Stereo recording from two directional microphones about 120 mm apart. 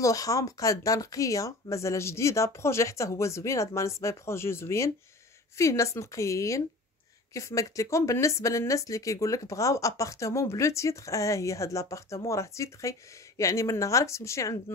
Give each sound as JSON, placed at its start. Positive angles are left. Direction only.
{"t": 0.0, "sound": "speech", "side_deg": 30}